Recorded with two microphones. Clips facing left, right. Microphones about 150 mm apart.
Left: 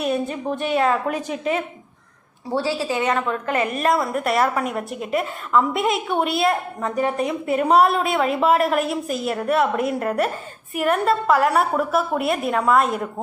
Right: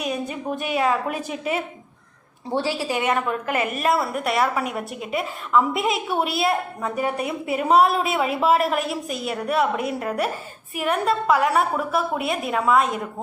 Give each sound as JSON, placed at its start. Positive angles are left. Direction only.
{"t": 0.5, "sound": "a woman's voice", "side_deg": -5}
{"t": 1.1, "sound": "speech", "side_deg": 40}
{"t": 2.5, "sound": "a woman's voice", "side_deg": -15}